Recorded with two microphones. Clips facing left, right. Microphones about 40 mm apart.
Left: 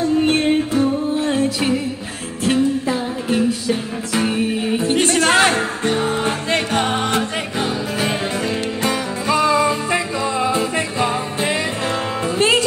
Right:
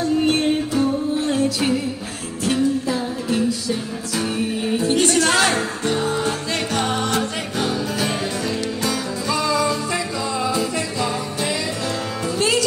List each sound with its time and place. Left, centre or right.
0.0 s music: left